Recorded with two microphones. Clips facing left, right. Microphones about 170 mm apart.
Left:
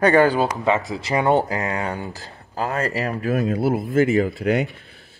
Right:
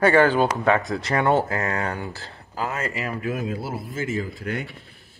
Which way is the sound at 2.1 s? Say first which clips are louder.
Left 2 dB; 35° left (ahead or behind).